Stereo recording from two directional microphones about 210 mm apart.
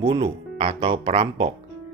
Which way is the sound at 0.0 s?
25° right (ahead or behind).